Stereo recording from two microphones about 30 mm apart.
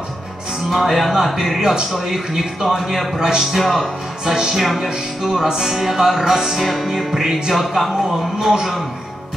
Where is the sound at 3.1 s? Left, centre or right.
Right.